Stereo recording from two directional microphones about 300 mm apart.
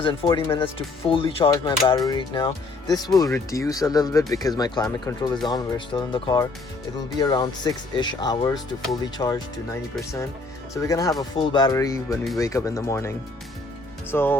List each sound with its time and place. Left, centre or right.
0.0 s speech: centre